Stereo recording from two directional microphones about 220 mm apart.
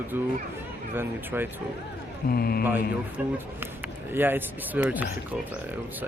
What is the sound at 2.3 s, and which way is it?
Speech, 45° left (ahead or behind).